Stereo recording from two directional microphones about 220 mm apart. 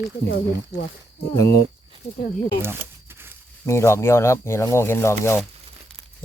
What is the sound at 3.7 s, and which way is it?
Speech, 10° left (ahead or behind).